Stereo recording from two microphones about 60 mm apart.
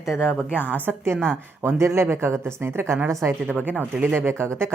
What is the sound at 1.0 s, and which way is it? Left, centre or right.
Speech, right.